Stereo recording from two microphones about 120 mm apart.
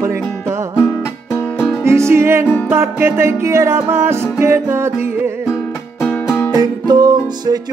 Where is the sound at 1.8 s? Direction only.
20° right (ahead or behind).